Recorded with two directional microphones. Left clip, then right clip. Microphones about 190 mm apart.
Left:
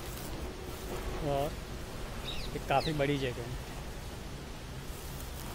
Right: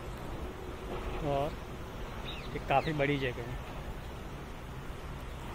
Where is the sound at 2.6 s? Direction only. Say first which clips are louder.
Right 1 dB; 10° left (ahead or behind).